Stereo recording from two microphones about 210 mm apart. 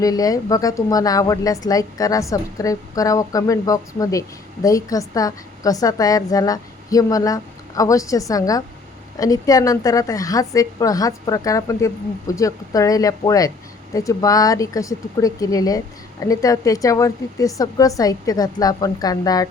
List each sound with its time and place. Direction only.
0.0 s a woman's voice: 15° left (ahead or behind)